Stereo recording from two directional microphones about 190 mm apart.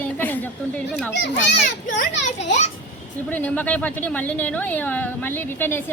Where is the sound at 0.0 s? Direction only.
10° left (ahead or behind).